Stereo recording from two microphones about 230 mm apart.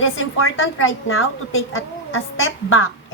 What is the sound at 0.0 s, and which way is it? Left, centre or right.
A woman's voice, left.